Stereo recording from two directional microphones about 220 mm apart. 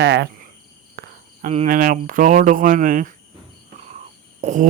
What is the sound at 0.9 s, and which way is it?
Cricket, 45° right (ahead or behind).